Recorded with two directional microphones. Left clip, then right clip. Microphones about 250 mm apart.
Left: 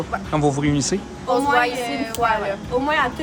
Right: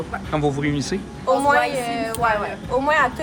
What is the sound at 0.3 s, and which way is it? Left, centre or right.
Speech, centre.